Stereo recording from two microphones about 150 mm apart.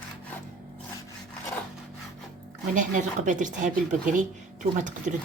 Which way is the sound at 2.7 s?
55° right (ahead or behind).